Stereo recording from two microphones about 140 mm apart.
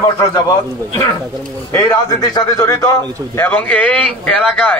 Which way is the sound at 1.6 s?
20° left (ahead or behind).